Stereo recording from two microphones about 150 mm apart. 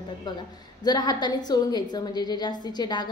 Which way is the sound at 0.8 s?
30° left (ahead or behind).